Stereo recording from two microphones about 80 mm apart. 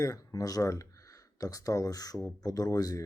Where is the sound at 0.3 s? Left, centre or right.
Left.